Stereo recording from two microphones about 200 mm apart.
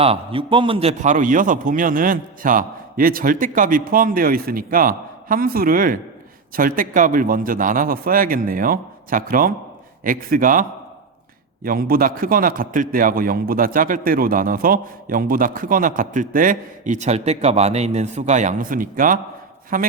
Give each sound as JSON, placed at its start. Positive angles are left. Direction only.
{"t": 0.0, "sound": "a man's voice", "side_deg": -30}